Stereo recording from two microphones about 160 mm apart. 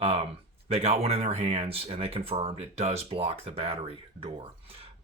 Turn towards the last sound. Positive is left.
turn(degrees=-35)  # may be behind; listen again after turning